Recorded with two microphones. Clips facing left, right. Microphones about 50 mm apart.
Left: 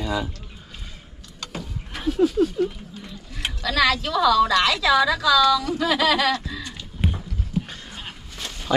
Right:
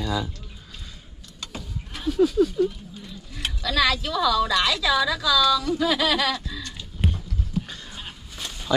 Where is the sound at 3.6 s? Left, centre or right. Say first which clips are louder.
Left 2 dB; left.